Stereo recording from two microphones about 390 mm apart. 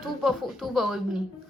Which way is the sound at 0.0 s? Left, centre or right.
Centre.